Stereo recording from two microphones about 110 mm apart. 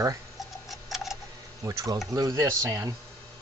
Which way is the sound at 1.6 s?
25° right (ahead or behind).